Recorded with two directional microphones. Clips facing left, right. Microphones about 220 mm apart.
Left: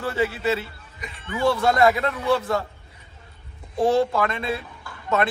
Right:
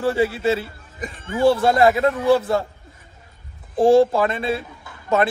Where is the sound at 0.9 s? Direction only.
45° right (ahead or behind).